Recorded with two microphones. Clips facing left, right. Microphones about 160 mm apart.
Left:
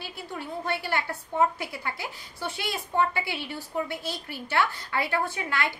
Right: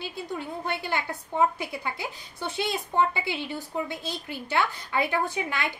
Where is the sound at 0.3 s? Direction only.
20° right (ahead or behind).